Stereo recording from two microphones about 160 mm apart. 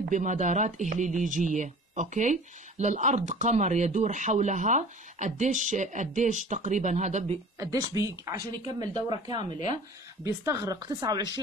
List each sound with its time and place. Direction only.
0.1 s speech: 50° right (ahead or behind)
7.5 s speech: 20° right (ahead or behind)